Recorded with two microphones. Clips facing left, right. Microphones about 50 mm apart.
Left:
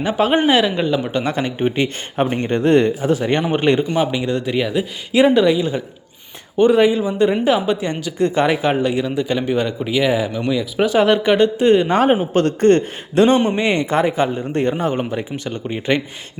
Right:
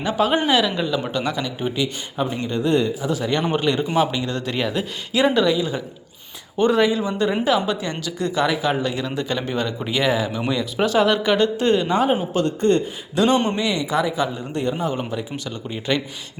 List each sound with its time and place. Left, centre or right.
0.0 s speech: left
1.1 s speech: left
2.1 s speech: left
3.1 s speech: left
3.9 s speech: centre
9.8 s speech: centre
10.9 s speech: left
11.9 s a man's voice: left
13.1 s speech: left
14.9 s speech: left